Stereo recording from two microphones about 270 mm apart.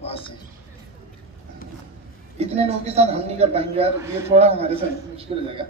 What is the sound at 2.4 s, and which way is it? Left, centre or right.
A woman's voice, right.